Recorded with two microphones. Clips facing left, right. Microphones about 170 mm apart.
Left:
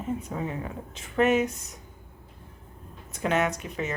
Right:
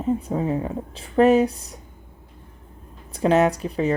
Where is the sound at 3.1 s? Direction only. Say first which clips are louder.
Right 8 dB; 35° right (ahead or behind).